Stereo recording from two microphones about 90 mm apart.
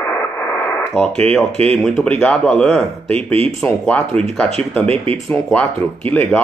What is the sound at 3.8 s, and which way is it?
Speech, 10° left (ahead or behind).